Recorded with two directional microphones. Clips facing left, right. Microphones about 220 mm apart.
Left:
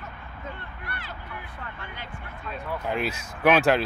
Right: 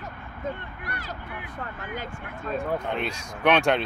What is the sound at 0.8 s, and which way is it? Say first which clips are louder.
Speech: right 2 dB; 40° right (ahead or behind).